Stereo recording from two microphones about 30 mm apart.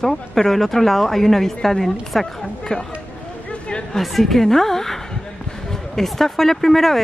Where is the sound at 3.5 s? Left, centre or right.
Left.